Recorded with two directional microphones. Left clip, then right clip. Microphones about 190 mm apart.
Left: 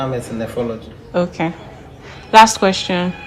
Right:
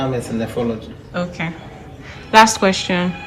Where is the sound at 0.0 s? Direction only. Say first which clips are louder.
Even; 10° left (ahead or behind).